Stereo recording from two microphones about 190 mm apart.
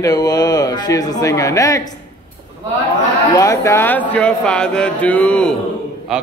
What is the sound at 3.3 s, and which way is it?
A man's voice, 15° left (ahead or behind).